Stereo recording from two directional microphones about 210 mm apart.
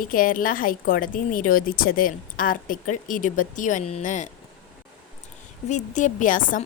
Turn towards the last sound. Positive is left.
turn(degrees=40)  # may be behind; listen again after turning